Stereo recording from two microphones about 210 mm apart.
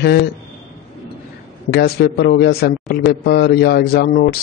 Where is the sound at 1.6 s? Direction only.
50° left (ahead or behind).